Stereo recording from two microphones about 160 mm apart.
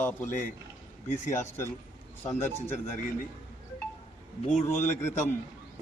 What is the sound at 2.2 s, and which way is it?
Speech, 15° left (ahead or behind).